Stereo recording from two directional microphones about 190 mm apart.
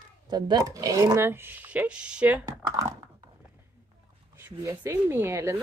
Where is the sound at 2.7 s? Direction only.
15° right (ahead or behind).